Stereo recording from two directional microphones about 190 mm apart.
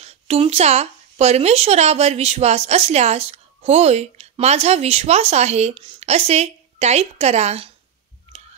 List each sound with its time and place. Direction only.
0.0 s speech: 35° right (ahead or behind)